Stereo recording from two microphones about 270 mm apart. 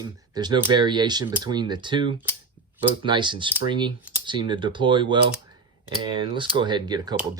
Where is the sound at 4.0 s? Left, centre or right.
Centre.